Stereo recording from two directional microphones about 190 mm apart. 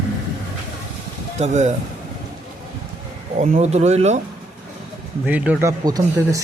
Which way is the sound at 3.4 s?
35° right (ahead or behind).